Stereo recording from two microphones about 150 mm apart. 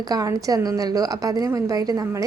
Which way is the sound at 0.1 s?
25° right (ahead or behind).